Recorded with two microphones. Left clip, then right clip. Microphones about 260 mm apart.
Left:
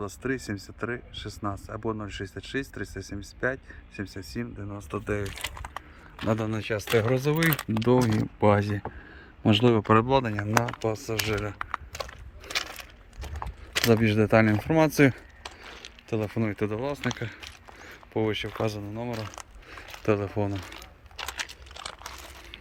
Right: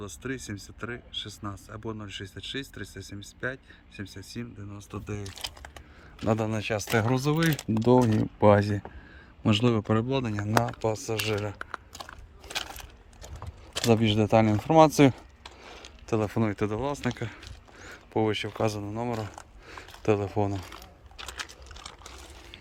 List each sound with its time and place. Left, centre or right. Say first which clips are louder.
0.2 s speech: left 4 dB; centre
6.2 s speech: right 1 dB; centre
8.0 s speech: right 1 dB; centre
8.4 s speech: right 2 dB; centre
13.8 s speech: left 1 dB; centre